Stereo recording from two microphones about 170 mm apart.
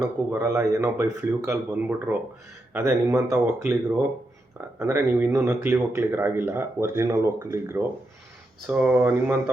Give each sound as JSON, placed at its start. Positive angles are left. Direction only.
{"t": 0.3, "sound": "speech", "side_deg": -15}
{"t": 3.3, "sound": "speech", "side_deg": -5}
{"t": 4.8, "sound": "speech", "side_deg": -15}